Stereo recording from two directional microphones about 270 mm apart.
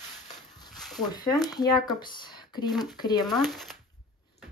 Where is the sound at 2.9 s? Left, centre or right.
Centre.